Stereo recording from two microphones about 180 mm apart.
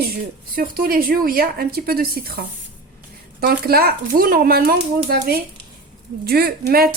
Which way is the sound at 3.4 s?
55° right (ahead or behind).